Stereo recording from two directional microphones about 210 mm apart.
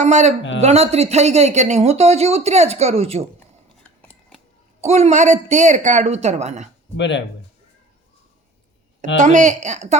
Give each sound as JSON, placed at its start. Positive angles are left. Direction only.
{"t": 0.0, "sound": "speech", "side_deg": -35}
{"t": 3.8, "sound": "scissors", "side_deg": 5}
{"t": 4.8, "sound": "speech", "side_deg": -30}
{"t": 6.9, "sound": "speech", "side_deg": 60}
{"t": 9.1, "sound": "speech", "side_deg": -35}